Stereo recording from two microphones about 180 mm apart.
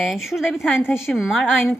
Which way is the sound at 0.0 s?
Centre (ahead or behind).